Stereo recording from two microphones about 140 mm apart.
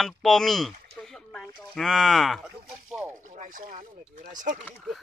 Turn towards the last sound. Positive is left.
turn(degrees=-65)  # may be behind; listen again after turning